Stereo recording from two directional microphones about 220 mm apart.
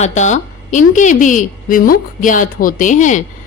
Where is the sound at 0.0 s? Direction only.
35° left (ahead or behind).